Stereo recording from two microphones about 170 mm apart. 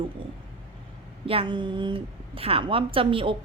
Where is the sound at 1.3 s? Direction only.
30° right (ahead or behind).